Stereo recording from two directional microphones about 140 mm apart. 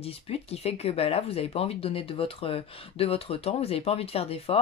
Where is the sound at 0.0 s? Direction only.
45° left (ahead or behind).